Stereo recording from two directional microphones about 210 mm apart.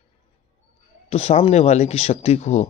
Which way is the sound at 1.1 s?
30° left (ahead or behind).